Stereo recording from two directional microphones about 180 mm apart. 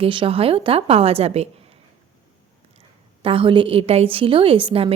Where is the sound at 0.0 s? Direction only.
30° right (ahead or behind).